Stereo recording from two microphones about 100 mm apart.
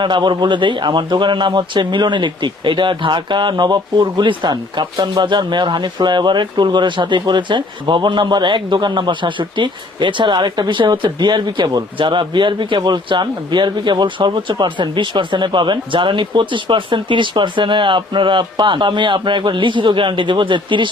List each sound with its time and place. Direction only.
0.0 s a man's voice: 50° right (ahead or behind)